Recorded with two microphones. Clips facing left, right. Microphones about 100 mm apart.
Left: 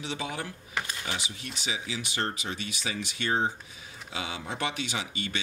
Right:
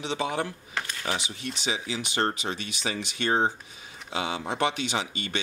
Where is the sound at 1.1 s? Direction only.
25° right (ahead or behind).